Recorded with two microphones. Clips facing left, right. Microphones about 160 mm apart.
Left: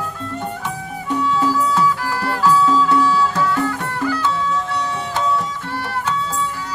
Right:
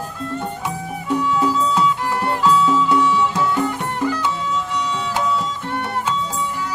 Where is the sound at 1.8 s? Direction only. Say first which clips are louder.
Even; 20° right (ahead or behind).